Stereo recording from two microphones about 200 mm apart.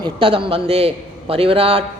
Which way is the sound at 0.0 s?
25° right (ahead or behind).